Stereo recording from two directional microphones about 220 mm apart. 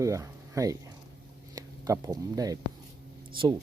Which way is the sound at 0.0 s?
15° right (ahead or behind).